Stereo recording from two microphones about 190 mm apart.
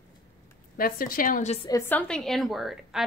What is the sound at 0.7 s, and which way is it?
Speech, 50° left (ahead or behind).